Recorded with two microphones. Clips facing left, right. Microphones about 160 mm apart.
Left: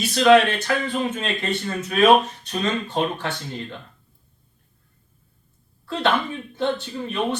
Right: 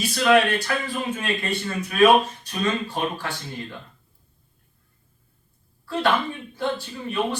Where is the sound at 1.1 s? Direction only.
25° left (ahead or behind).